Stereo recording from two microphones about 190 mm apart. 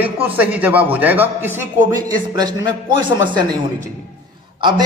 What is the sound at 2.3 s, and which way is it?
A man's voice, 20° right (ahead or behind).